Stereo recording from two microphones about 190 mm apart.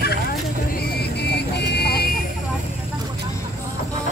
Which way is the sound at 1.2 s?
60° left (ahead or behind).